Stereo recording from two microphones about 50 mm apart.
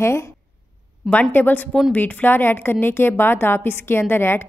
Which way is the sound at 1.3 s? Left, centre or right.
Left.